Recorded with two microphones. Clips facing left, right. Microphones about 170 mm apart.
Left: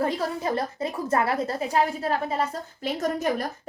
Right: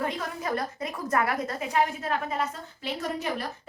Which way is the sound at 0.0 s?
30° left (ahead or behind).